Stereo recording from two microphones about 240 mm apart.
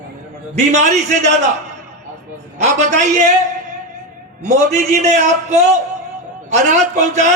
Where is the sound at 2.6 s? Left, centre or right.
Right.